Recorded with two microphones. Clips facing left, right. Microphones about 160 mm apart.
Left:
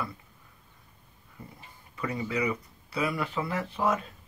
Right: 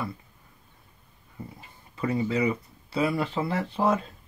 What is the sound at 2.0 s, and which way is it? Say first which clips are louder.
Speech: right 5 dB; 30° right (ahead or behind).